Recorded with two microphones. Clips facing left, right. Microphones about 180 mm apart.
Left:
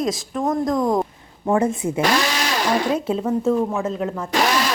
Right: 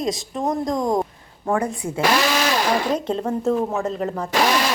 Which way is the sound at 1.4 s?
20° left (ahead or behind).